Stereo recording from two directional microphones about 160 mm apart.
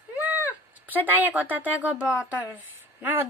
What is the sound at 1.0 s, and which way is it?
Speech, 10° right (ahead or behind).